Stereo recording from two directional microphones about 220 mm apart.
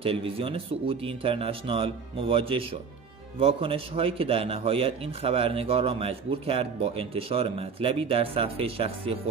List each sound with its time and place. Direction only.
0.0 s a man's voice: 25° right (ahead or behind)